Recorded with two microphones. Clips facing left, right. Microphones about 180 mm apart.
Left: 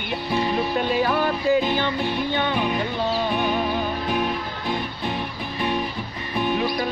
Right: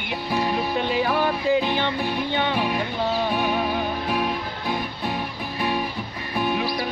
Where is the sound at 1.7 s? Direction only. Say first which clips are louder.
Left 1 dB; 15° right (ahead or behind).